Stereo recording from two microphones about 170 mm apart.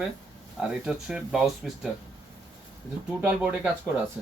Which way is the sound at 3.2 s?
5° right (ahead or behind).